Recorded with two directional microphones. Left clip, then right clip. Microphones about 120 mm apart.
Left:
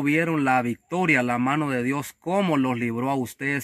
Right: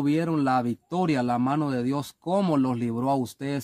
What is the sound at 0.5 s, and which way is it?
Speech, 15° left (ahead or behind).